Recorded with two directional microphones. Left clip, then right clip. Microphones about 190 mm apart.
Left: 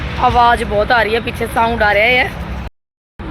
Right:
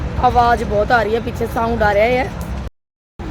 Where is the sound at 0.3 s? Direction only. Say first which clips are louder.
Left 4 dB; centre (ahead or behind).